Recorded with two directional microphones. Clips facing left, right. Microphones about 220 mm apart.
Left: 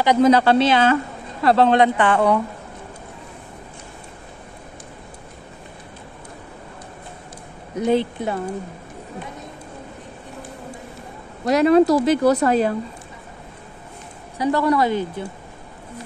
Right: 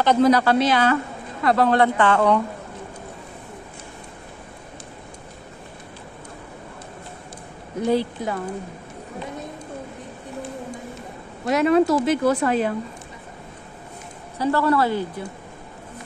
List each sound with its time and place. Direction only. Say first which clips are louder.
0.0 s a woman's voice: left 1 dB; 15° left (ahead or behind)
0.3 s a woman's voice: left 3 dB; 25° left (ahead or behind); by 2.4 s 10° left (ahead or behind)
7.7 s speech: left 2 dB; 20° left (ahead or behind)
11.4 s a woman's voice: left 3 dB; 35° left (ahead or behind)
14.4 s a woman's voice: left 1 dB; 15° left (ahead or behind)